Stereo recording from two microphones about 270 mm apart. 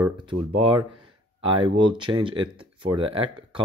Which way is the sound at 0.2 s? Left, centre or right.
Centre.